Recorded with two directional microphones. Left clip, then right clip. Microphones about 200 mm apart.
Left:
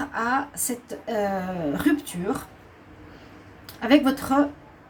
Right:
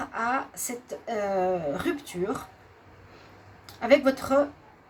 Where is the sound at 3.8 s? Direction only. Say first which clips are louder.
Left 1 dB; 45° right (ahead or behind).